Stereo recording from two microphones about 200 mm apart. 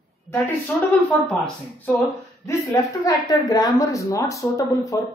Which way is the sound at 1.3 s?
10° left (ahead or behind).